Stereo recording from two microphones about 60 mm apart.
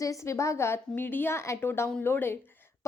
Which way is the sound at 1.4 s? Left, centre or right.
Left.